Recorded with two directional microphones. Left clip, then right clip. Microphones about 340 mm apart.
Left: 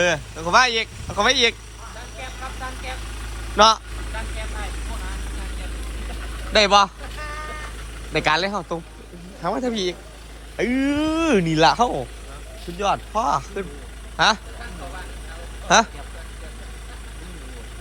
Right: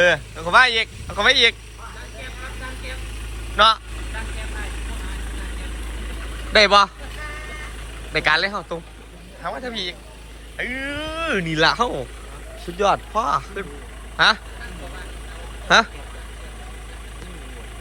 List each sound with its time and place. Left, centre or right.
0.0 s speech: centre
3.6 s speech: centre
6.5 s speech: centre
8.1 s speech: centre
15.6 s speech: centre